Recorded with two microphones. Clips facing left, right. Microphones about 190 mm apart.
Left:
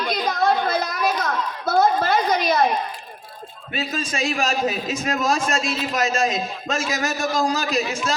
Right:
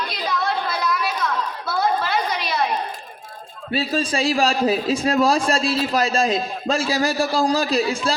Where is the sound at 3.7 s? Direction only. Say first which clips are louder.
Right 5 dB; 35° right (ahead or behind).